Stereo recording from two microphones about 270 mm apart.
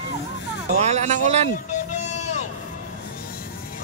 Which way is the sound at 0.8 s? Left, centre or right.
Right.